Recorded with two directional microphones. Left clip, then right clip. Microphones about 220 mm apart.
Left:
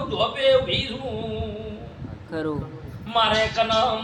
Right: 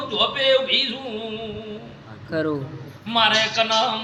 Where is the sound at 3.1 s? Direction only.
10° left (ahead or behind).